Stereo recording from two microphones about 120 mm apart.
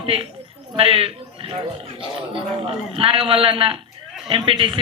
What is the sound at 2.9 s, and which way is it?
A man's voice, 50° right (ahead or behind).